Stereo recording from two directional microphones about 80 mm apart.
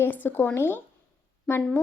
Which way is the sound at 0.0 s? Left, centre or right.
Left.